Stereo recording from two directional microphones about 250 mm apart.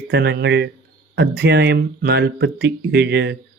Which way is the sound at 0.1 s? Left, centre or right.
Right.